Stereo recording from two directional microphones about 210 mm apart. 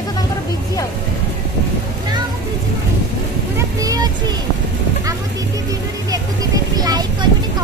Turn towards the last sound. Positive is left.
turn(degrees=-20)  # may be behind; listen again after turning